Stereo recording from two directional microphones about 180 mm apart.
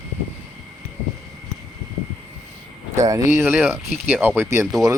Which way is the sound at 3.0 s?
20° right (ahead or behind).